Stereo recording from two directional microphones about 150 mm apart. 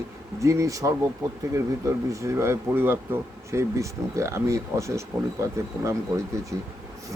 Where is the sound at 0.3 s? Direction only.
20° right (ahead or behind).